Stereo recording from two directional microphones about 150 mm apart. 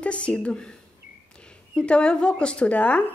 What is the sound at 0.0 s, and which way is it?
Speech, 10° left (ahead or behind).